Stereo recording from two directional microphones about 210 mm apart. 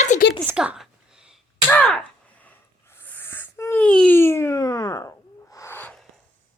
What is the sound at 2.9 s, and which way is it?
Wail, 10° left (ahead or behind).